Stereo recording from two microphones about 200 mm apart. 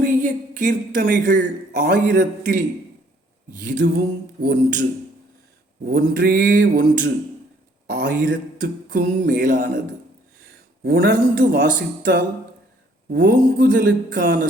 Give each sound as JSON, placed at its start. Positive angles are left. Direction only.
{"t": 0.0, "sound": "a man's voice", "side_deg": -40}
{"t": 3.8, "sound": "a sound", "side_deg": -55}
{"t": 4.5, "sound": "speech", "side_deg": -40}
{"t": 7.9, "sound": "a sound", "side_deg": -45}
{"t": 9.4, "sound": "speech", "side_deg": -40}
{"t": 10.8, "sound": "speech", "side_deg": -50}